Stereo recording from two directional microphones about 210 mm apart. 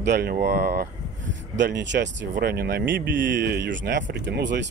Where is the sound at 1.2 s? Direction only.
60° right (ahead or behind).